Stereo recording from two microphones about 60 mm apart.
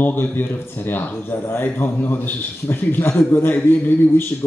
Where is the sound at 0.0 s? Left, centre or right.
Left.